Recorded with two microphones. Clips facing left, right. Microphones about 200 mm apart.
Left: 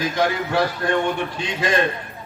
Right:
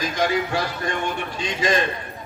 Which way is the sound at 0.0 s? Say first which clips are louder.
Left 1 dB; 60° left (ahead or behind).